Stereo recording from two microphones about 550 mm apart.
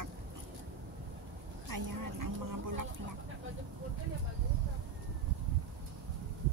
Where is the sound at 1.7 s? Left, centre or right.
Right.